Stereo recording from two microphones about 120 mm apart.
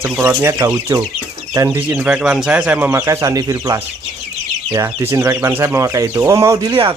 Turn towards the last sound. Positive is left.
turn(degrees=-45)  # may be behind; listen again after turning